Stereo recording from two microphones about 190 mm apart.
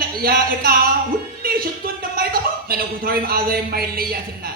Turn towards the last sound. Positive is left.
turn(degrees=-50)  # may be behind; listen again after turning